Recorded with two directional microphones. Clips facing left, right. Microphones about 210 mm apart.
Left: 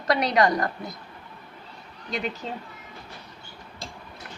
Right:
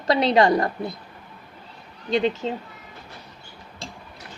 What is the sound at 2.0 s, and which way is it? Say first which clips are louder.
Speech: right 9 dB; 25° right (ahead or behind).